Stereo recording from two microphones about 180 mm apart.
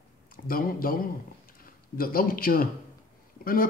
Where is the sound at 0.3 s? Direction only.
55° left (ahead or behind).